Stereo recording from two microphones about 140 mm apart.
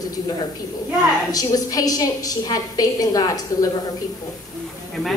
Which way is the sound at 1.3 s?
25° left (ahead or behind).